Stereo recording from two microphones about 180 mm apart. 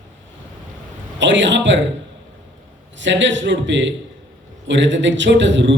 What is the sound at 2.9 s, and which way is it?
A man's voice, 90° right.